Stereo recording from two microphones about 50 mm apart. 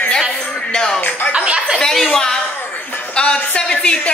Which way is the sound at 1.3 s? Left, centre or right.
Centre.